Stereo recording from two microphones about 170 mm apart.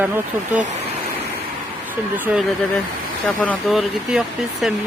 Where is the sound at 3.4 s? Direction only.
5° left (ahead or behind).